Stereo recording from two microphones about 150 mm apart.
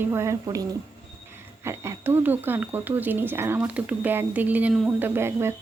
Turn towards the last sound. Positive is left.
turn(degrees=-15)  # may be behind; listen again after turning